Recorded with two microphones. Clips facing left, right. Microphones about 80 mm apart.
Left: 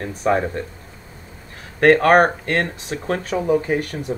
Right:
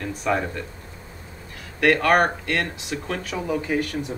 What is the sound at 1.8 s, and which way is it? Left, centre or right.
Speech, left.